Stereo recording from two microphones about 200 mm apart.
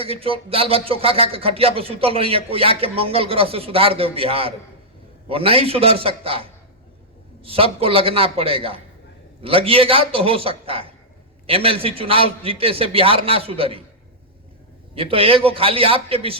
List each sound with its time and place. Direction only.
0.0 s speech: 30° right (ahead or behind)
14.9 s speech: 30° right (ahead or behind)